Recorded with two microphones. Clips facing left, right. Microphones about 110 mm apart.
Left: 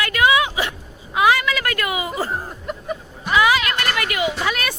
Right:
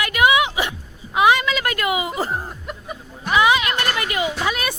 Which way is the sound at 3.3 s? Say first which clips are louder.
Even; 20° right (ahead or behind).